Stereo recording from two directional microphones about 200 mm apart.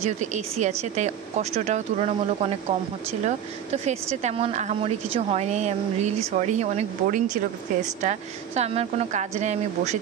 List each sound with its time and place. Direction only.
0.0 s speech: 35° right (ahead or behind)